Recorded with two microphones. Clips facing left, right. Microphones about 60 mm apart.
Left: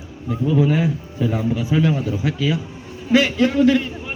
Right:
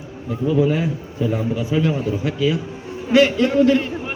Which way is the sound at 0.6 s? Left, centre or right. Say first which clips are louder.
Even; centre.